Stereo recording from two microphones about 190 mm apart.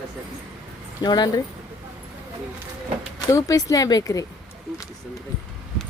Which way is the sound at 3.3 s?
20° left (ahead or behind).